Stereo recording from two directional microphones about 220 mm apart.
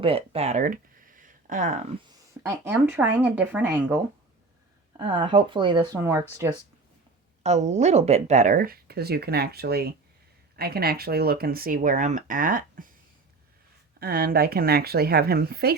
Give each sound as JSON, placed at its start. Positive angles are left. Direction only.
{"t": 0.0, "sound": "speech", "side_deg": -25}
{"t": 2.4, "sound": "speech", "side_deg": -15}
{"t": 4.9, "sound": "speech", "side_deg": -25}
{"t": 7.4, "sound": "speech", "side_deg": -30}
{"t": 14.0, "sound": "speech", "side_deg": -40}